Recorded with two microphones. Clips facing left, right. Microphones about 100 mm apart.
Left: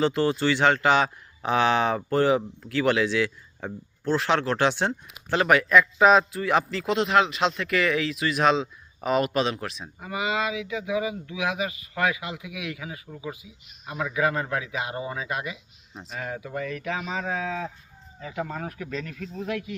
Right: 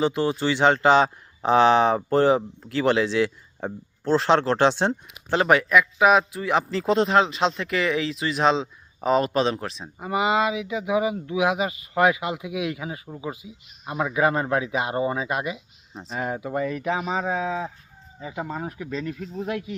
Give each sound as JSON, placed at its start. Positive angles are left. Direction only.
{"t": 0.0, "sound": "speech", "side_deg": -15}
{"t": 5.8, "sound": "speech", "side_deg": -10}